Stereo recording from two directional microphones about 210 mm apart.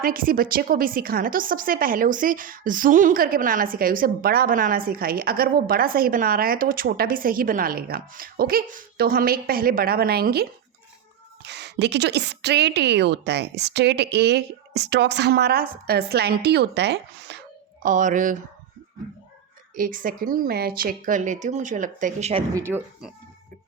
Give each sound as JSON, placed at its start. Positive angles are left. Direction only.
{"t": 0.0, "sound": "speech", "side_deg": -40}
{"t": 17.8, "sound": "speech", "side_deg": -40}
{"t": 19.7, "sound": "speech", "side_deg": -40}
{"t": 22.5, "sound": "speech", "side_deg": -10}